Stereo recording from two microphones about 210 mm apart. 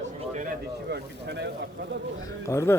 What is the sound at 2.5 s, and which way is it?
Speech, 15° left (ahead or behind).